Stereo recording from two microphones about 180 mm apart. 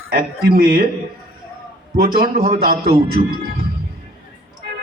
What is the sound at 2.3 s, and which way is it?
Speech, 35° right (ahead or behind).